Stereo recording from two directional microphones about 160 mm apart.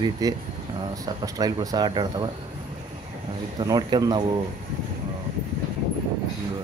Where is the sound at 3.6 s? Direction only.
25° right (ahead or behind).